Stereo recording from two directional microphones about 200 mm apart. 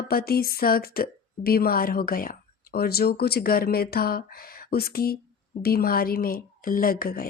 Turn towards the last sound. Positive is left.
turn(degrees=45)  # may be behind; listen again after turning